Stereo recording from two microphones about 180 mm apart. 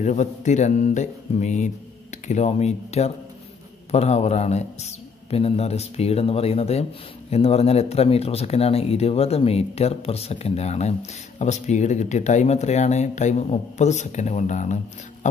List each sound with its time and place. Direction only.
0.0 s speech: 40° left (ahead or behind)